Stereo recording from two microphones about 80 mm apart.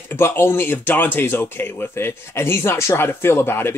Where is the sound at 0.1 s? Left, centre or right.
Left.